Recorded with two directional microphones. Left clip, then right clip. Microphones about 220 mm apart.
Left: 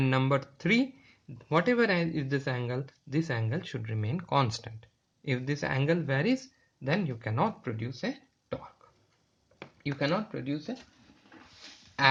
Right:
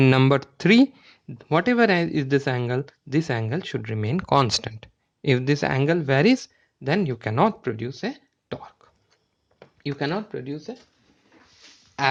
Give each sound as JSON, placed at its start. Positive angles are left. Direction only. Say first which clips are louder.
{"t": 0.0, "sound": "speech", "louder": "right 9 dB", "side_deg": -45}
{"t": 10.0, "sound": "speech", "louder": "right 2 dB", "side_deg": -35}